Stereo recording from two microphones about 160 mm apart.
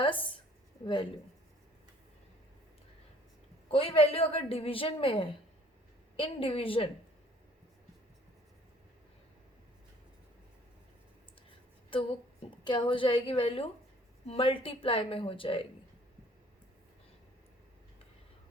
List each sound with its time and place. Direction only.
0.0 s a woman's voice: 30° left (ahead or behind)
3.7 s a woman's voice: 35° left (ahead or behind)
11.9 s a woman's voice: 35° left (ahead or behind)